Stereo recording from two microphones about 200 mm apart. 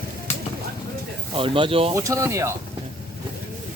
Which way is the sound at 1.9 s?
15° right (ahead or behind).